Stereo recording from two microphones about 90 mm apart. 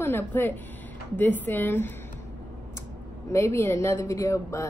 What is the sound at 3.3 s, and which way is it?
Speech, 30° left (ahead or behind).